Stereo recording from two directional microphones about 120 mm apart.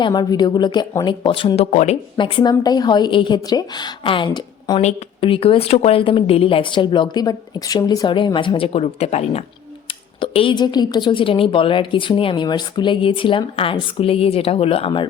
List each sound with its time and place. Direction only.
0.0 s a woman's voice: 35° left (ahead or behind)
1.7 s speech: 75° left (ahead or behind)
2.1 s a woman's voice: 45° left (ahead or behind); by 9.4 s 60° left (ahead or behind)
10.2 s a woman's voice: 45° left (ahead or behind)